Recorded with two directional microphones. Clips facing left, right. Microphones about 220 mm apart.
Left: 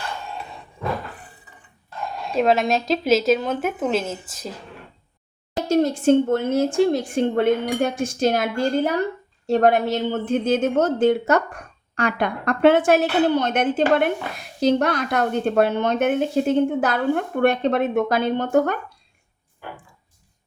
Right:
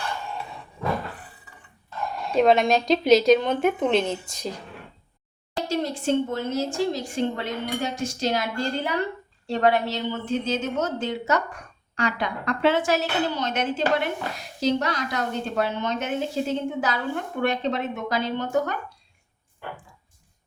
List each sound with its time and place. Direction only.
2.3 s speech: centre (ahead or behind)
5.6 s a woman's voice: 45° left (ahead or behind)